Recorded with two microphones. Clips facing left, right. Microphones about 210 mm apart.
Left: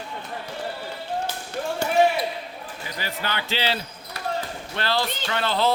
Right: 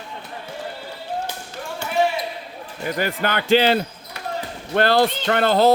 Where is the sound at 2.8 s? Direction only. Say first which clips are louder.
Right 9 dB; 55° right (ahead or behind).